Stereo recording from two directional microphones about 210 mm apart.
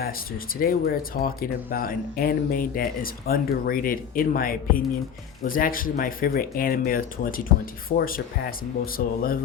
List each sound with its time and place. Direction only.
0.6 s speech: 45° left (ahead or behind)